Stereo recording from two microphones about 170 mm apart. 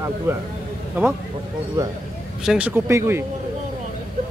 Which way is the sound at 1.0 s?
15° right (ahead or behind).